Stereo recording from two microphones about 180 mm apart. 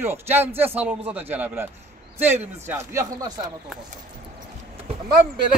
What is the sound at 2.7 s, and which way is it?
Speech, 15° right (ahead or behind).